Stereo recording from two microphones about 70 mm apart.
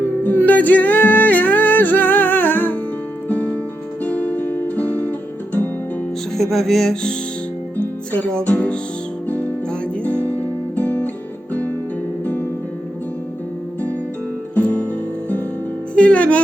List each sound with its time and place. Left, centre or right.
0.3 s music: left
6.3 s music: centre; by 8.8 s left
10.8 s music: left
12.2 s music: left
14.6 s music: centre
16.0 s speech: centre